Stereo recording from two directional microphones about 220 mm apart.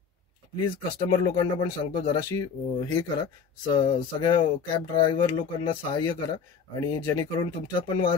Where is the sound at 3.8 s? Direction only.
20° left (ahead or behind).